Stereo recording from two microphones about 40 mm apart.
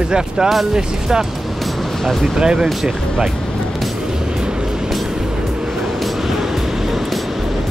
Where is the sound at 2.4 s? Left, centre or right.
Right.